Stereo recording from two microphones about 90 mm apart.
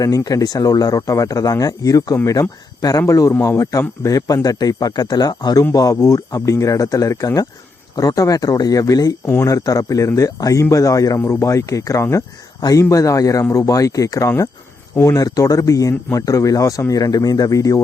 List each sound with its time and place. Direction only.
0.0 s speech: 40° left (ahead or behind)
5.7 s speech: 40° left (ahead or behind)
16.9 s speech: 50° left (ahead or behind)